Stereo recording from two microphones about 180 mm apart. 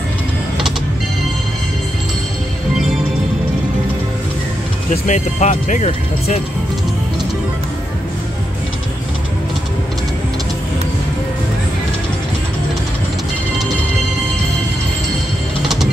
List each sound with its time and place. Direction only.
5.0 s speech: 40° left (ahead or behind)